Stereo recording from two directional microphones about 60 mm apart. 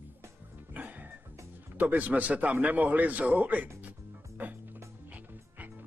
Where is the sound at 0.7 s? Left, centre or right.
Right.